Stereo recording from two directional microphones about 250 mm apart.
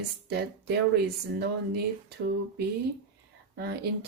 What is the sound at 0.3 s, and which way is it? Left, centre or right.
Speech, right.